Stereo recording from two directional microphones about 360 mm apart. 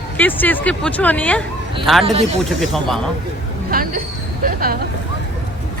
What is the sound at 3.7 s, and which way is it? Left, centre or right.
Speech, right.